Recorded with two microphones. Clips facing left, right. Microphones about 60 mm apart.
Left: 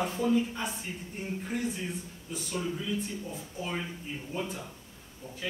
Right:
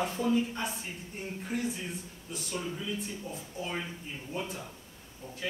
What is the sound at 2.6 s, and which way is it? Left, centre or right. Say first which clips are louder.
Speech: left 3 dB; centre.